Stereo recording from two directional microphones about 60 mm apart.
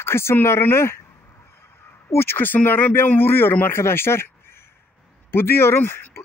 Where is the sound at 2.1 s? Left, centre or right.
Left.